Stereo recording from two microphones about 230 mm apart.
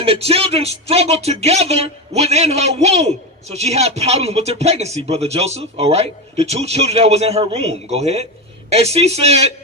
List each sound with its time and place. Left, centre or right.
0.0 s speech: right